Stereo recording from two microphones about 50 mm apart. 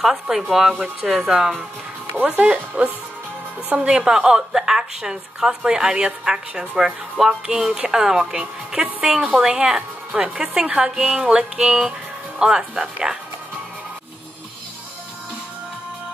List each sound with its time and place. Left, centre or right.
0.0 s a woman's voice: centre
2.1 s a woman's voice: right; by 13.2 s centre